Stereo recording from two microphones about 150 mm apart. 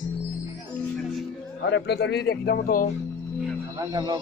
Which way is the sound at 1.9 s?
90° left.